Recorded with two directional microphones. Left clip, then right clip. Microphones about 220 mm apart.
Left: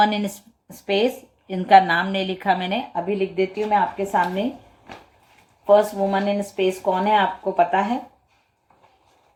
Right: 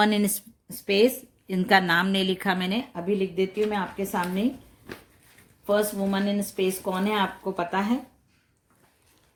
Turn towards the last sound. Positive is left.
turn(degrees=-35)  # may be behind; listen again after turning